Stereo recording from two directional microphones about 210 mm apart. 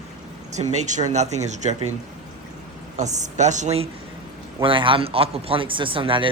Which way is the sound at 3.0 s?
35° right (ahead or behind).